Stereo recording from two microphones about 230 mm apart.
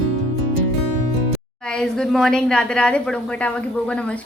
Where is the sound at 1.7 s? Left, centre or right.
Centre.